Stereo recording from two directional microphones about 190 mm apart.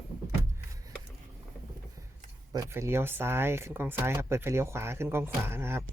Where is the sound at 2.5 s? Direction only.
15° right (ahead or behind).